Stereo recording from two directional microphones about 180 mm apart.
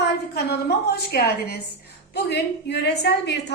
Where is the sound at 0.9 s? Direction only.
65° left (ahead or behind).